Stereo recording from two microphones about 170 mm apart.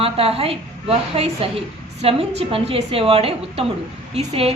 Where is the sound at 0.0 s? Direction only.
35° right (ahead or behind).